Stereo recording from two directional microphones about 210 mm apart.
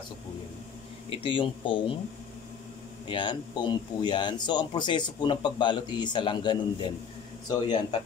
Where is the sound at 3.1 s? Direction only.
20° left (ahead or behind).